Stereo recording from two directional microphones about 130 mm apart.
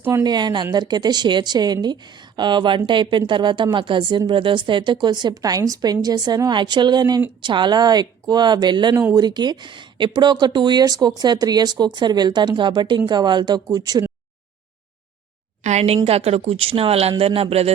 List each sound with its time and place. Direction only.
0.0 s a woman's voice: 30° right (ahead or behind)
15.6 s a woman's voice: 60° right (ahead or behind)